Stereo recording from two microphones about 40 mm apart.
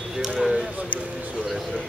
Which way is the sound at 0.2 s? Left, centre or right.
Centre.